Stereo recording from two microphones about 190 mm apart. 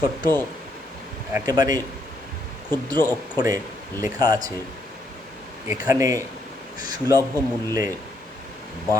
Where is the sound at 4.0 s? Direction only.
20° right (ahead or behind).